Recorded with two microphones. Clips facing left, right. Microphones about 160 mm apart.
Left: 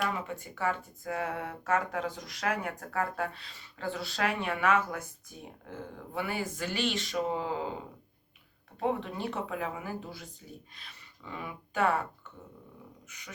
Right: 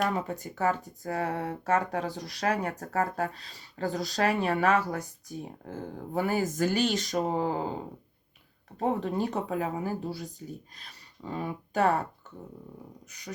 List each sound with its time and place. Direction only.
0.0 s speech: 40° right (ahead or behind)
13.1 s speech: 40° right (ahead or behind)